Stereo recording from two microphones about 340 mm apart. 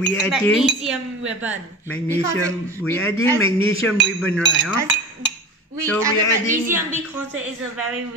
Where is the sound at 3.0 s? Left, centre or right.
Left.